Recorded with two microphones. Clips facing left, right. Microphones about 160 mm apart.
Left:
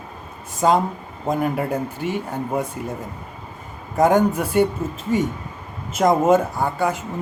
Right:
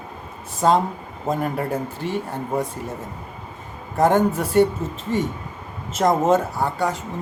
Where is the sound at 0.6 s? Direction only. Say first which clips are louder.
Even; 5° left (ahead or behind).